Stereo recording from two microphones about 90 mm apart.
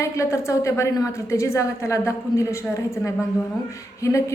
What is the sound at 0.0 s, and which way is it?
A woman's voice, 35° left (ahead or behind).